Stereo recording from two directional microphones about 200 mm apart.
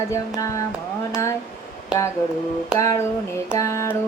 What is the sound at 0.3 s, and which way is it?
Female singing, 15° left (ahead or behind).